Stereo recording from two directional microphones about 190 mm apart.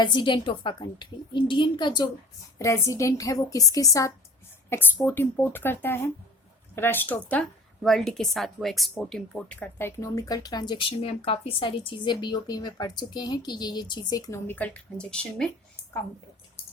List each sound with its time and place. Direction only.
0.0 s a woman's voice: 25° left (ahead or behind); by 15.8 s 5° left (ahead or behind)